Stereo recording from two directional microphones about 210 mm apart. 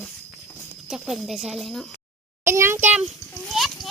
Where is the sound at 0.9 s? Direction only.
Centre (ahead or behind).